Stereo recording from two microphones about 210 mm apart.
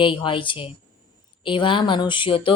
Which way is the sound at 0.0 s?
25° left (ahead or behind).